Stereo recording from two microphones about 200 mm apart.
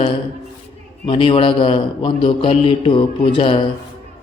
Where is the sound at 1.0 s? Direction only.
25° left (ahead or behind).